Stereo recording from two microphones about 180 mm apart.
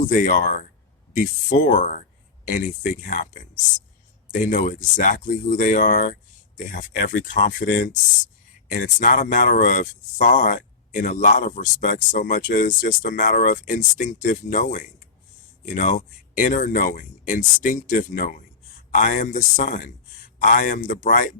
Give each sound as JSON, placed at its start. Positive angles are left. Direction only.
{"t": 0.0, "sound": "speech", "side_deg": 45}